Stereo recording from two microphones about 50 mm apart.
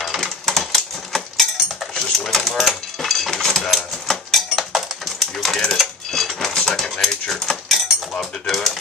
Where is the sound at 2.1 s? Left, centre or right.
Centre.